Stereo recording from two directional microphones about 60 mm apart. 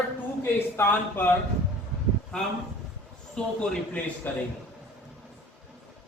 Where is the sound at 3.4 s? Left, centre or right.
Centre.